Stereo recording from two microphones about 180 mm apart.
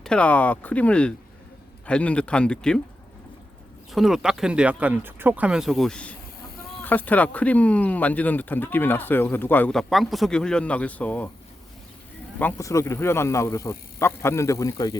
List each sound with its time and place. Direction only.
0.0 s speech: 5° left (ahead or behind)
3.9 s speech: centre (ahead or behind)
12.4 s speech: 15° left (ahead or behind)